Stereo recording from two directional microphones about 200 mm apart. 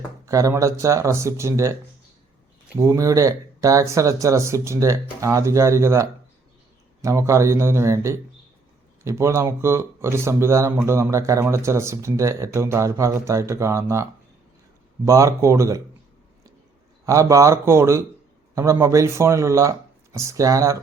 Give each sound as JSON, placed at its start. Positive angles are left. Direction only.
{"t": 0.3, "sound": "speech", "side_deg": -15}
{"t": 2.7, "sound": "speech", "side_deg": -15}
{"t": 17.1, "sound": "speech", "side_deg": -15}